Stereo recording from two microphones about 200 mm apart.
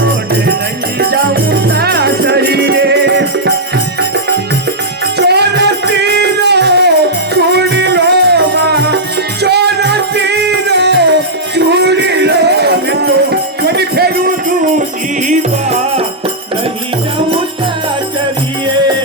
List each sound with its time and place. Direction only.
0.9 s music: 50° right (ahead or behind)
5.1 s music: 55° right (ahead or behind)
15.3 s music: 35° right (ahead or behind)